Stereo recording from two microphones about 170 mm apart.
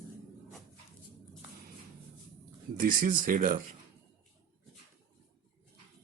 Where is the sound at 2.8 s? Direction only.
55° right (ahead or behind).